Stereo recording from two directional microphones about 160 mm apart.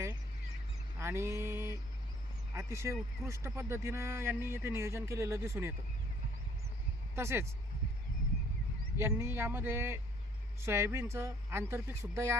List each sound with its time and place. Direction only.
0.9 s a sound: 15° right (ahead or behind)
2.6 s a man's voice: 15° right (ahead or behind)
7.2 s a man's voice: 15° right (ahead or behind)
9.0 s a man's voice: 15° right (ahead or behind)